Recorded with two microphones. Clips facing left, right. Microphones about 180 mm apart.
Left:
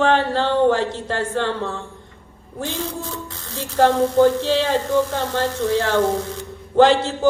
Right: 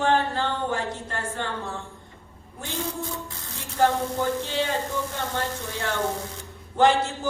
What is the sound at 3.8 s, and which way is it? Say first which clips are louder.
Speech: left 8 dB; 85° left.